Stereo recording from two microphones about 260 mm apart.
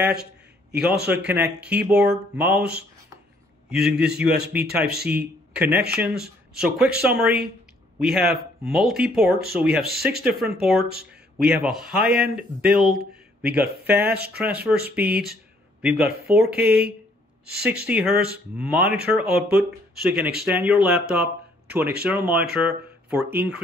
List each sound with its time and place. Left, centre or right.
0.7 s speech: centre
3.7 s speech: centre
4.9 s speech: right
5.5 s speech: centre
14.0 s speech: right
14.4 s speech: centre